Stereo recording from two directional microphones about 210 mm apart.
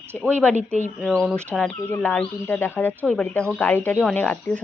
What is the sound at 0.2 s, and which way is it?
Speech, 5° left (ahead or behind).